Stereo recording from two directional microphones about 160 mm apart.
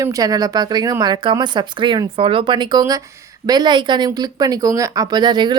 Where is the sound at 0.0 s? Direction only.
20° right (ahead or behind).